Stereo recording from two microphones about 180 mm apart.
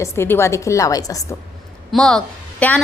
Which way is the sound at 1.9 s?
5° left (ahead or behind).